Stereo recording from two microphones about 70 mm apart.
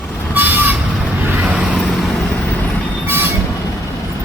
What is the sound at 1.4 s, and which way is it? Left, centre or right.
Vehicle, centre.